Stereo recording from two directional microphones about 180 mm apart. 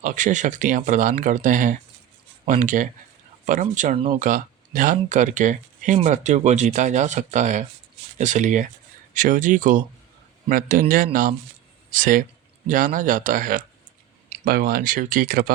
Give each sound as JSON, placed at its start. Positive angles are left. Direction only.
{"t": 0.0, "sound": "speech", "side_deg": -45}